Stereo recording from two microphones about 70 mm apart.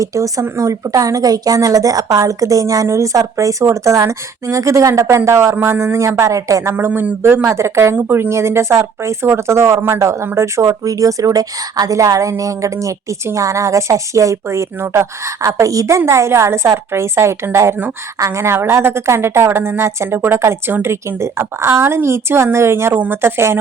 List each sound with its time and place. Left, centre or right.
0.0 s a woman's voice: right
6.7 s speech: right
7.9 s a woman's voice: right
16.0 s speech: right